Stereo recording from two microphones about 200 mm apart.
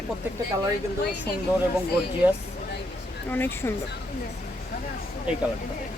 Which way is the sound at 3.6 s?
15° left (ahead or behind).